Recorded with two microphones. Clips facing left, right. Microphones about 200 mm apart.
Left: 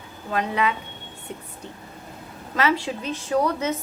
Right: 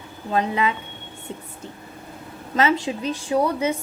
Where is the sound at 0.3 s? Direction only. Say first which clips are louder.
Right 2 dB; 25° right (ahead or behind).